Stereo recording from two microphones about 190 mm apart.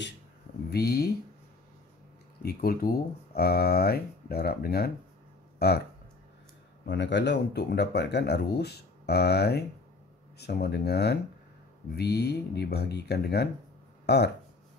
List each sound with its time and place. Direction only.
0.7 s speech: 55° left (ahead or behind)
2.4 s speech: 55° left (ahead or behind)
6.9 s speech: 65° left (ahead or behind)